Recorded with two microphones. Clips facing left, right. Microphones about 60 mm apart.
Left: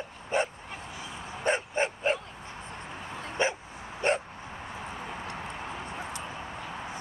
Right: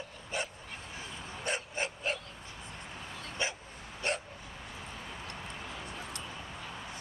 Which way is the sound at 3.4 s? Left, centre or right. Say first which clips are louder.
Left 8 dB; left.